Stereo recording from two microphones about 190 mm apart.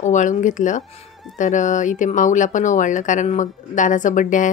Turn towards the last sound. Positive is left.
turn(degrees=40)  # may be behind; listen again after turning